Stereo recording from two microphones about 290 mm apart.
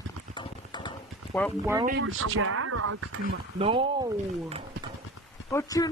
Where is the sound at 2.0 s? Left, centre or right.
Right.